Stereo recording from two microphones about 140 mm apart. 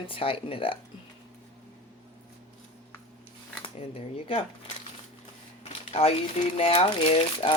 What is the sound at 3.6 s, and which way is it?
Speech, 45° left (ahead or behind).